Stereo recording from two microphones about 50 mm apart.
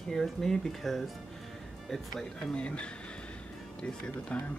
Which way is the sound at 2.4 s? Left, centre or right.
Left.